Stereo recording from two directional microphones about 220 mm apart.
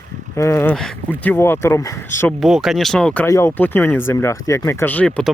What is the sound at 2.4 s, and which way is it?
Speech, centre (ahead or behind).